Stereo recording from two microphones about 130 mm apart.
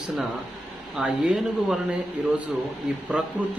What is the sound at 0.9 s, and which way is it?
Speech, 5° right (ahead or behind).